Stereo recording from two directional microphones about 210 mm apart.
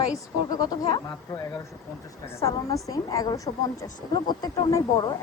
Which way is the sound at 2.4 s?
15° left (ahead or behind).